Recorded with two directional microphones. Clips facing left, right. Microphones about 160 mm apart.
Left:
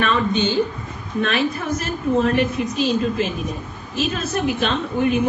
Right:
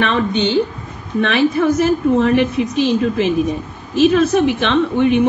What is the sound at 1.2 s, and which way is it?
A woman's voice, 80° right.